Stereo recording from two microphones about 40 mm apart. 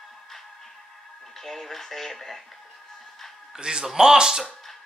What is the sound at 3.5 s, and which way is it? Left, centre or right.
Speech, centre.